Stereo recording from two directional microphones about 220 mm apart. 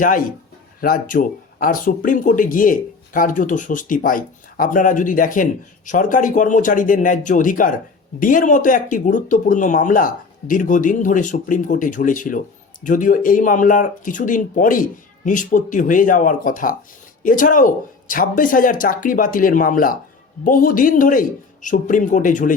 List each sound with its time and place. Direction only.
0.0 s speech: 40° left (ahead or behind)